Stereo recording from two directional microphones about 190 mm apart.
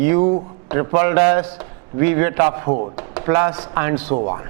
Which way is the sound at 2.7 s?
40° right (ahead or behind).